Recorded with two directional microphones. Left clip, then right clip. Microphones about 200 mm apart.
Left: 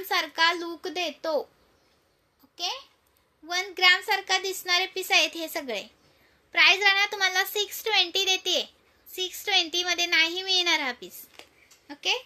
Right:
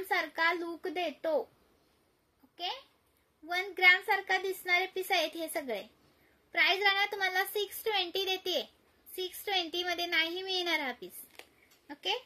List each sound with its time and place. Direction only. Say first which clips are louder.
0.1 s a child's voice: left 6 dB; 15° right (ahead or behind)
3.4 s a child's voice: left 4 dB; 10° right (ahead or behind)
11.4 s a sound: left 3 dB; 20° left (ahead or behind)
11.9 s a child's voice: left 7 dB; 10° right (ahead or behind)